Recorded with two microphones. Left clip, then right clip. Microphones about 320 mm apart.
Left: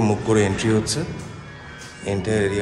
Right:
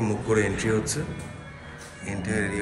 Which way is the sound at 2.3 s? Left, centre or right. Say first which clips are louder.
Left 6 dB; left.